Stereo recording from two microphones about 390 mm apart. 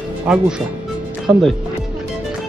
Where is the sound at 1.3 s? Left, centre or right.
Centre.